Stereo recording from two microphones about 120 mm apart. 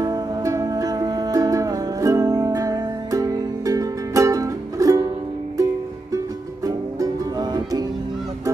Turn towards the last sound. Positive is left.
turn(degrees=-35)  # may be behind; listen again after turning